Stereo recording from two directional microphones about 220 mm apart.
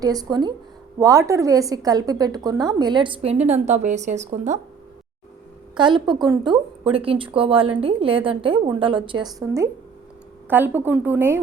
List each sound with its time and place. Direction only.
0.0 s a woman's voice: 15° right (ahead or behind)
5.7 s a woman's voice: 20° right (ahead or behind)